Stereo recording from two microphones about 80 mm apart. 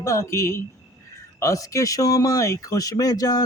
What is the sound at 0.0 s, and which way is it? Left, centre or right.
Speech, left.